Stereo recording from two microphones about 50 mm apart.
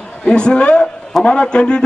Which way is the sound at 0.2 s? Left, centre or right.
Centre.